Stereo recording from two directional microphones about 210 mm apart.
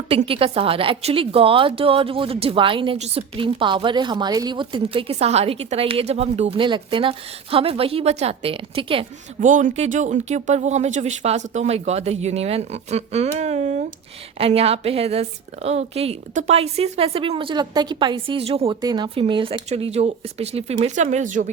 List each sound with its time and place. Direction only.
0.1 s a woman's voice: 25° right (ahead or behind)